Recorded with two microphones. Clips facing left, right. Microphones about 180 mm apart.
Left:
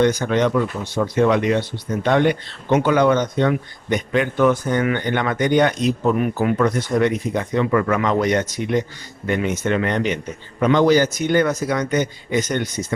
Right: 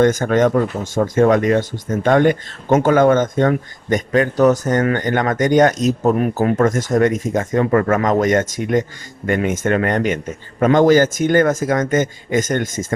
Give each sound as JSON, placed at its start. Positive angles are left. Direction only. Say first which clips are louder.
{"t": 0.0, "sound": "speech", "louder": "right 3 dB", "side_deg": -45}